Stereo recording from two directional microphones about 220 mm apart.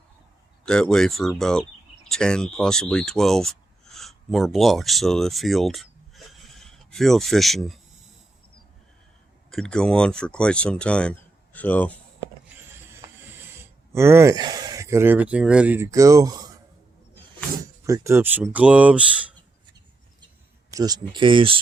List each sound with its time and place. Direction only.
0.6 s speech: 5° left (ahead or behind)
9.5 s speech: 5° left (ahead or behind)
13.9 s speech: 10° right (ahead or behind)
17.8 s speech: 15° right (ahead or behind)
20.7 s speech: 15° right (ahead or behind)